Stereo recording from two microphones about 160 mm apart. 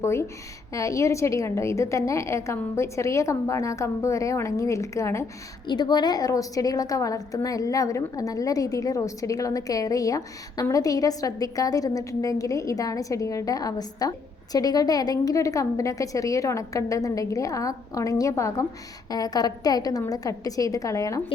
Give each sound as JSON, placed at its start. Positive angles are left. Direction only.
{"t": 0.0, "sound": "a woman's voice", "side_deg": 15}